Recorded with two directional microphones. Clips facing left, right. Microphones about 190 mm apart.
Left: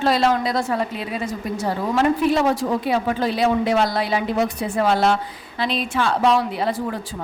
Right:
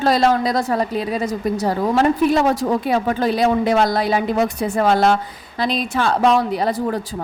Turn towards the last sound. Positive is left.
turn(degrees=-40)  # may be behind; listen again after turning